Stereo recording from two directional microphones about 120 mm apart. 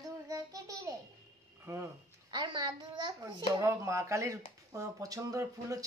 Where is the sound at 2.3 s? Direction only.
35° right (ahead or behind).